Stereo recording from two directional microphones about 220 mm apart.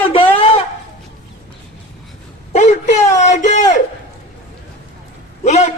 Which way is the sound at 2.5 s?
30° left (ahead or behind).